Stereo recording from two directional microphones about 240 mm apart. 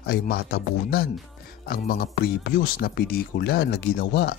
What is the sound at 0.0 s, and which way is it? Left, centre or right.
Speech, left.